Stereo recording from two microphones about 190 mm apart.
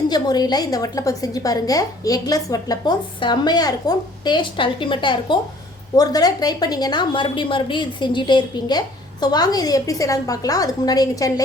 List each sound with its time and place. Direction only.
0.1 s a woman's voice: 20° left (ahead or behind)